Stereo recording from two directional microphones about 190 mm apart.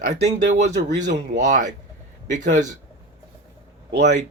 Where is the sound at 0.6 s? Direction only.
40° right (ahead or behind).